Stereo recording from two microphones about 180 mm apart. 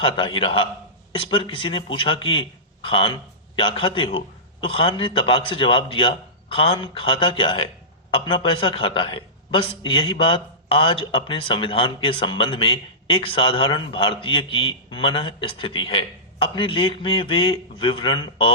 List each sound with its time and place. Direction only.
0.0 s a man's voice: 30° left (ahead or behind)